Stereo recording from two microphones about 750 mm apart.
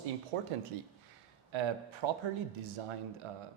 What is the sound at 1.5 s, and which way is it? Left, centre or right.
Speech, right.